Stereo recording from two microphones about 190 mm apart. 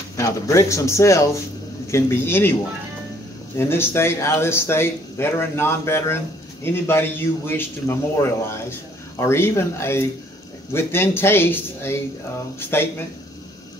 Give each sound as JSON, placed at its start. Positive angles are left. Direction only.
{"t": 0.2, "sound": "speech", "side_deg": 15}
{"t": 3.5, "sound": "speech", "side_deg": 15}